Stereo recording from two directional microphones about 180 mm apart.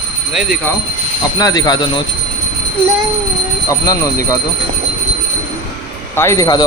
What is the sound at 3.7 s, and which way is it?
Speech, 20° left (ahead or behind).